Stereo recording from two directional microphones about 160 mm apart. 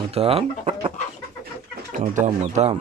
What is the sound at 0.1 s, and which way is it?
Speech, 40° right (ahead or behind).